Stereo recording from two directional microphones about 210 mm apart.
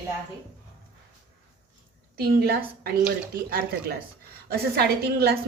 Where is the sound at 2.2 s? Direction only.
50° right (ahead or behind).